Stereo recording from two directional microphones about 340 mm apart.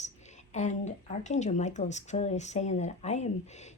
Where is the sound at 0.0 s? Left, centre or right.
Centre.